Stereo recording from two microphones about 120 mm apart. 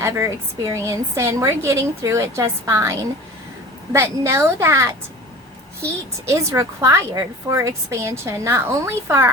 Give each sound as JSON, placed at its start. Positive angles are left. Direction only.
{"t": 0.0, "sound": "a woman's voice", "side_deg": -25}